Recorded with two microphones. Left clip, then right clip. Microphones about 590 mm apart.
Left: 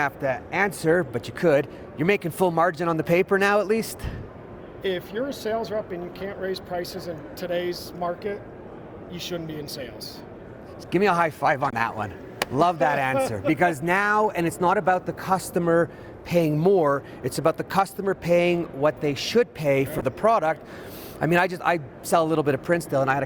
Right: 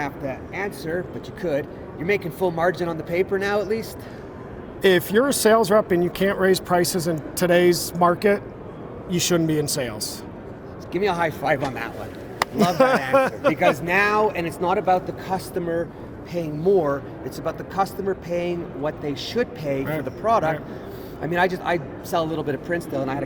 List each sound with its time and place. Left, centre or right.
0.0 s speech: left
4.8 s speech: right
10.9 s speech: left
13.1 s speech: right
13.5 s a man's voice: left
16.3 s a man's voice: left